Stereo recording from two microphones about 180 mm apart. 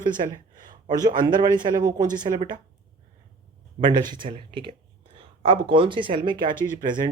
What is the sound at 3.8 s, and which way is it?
Speech, 25° right (ahead or behind).